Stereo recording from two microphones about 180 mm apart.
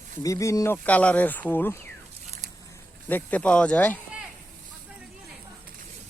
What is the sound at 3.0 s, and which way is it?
Speech, 10° left (ahead or behind).